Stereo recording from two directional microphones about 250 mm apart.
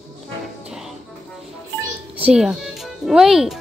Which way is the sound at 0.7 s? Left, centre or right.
Centre.